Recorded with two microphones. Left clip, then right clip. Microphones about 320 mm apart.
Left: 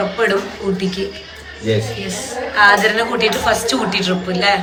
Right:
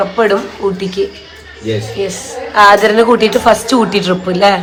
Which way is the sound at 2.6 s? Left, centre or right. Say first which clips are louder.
Right 5 dB; centre.